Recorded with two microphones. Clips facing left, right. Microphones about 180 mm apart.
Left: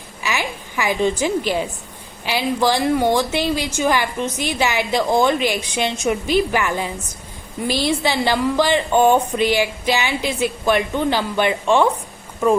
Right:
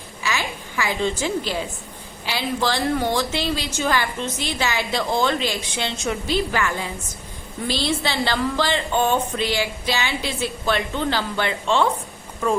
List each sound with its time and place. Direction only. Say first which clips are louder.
0.2 s a woman's voice: left 2 dB; 15° left (ahead or behind)